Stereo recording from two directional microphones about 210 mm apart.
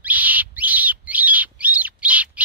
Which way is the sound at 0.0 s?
5° right (ahead or behind).